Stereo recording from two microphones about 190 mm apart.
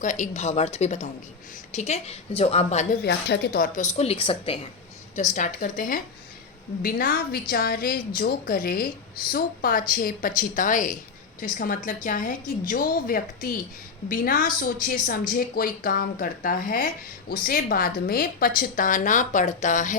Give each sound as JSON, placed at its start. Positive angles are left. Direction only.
{"t": 0.0, "sound": "a woman's voice", "side_deg": 40}
{"t": 3.0, "sound": "a woman's voice", "side_deg": 60}
{"t": 5.1, "sound": "speech", "side_deg": 40}